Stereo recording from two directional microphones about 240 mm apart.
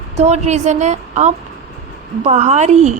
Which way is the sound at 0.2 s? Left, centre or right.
Right.